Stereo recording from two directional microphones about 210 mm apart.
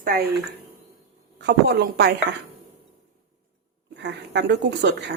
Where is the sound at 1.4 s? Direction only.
50° right (ahead or behind).